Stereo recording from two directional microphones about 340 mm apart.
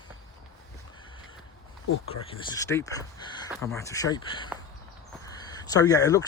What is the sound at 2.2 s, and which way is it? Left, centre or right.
Speech, centre.